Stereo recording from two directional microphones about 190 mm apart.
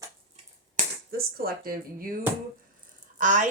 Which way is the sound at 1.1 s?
50° right (ahead or behind).